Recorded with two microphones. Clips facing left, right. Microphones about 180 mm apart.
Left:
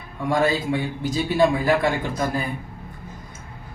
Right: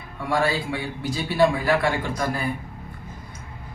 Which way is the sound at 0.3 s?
20° left (ahead or behind).